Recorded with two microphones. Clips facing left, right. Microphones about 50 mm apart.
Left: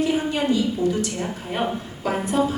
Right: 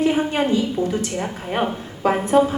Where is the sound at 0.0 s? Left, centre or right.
Right.